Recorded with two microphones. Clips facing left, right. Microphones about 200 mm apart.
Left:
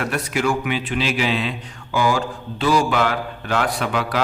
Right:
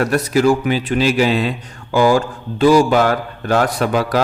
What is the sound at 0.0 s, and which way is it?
Speech, 40° right (ahead or behind).